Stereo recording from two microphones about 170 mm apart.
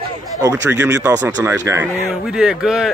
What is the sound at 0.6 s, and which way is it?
Speech, 20° right (ahead or behind).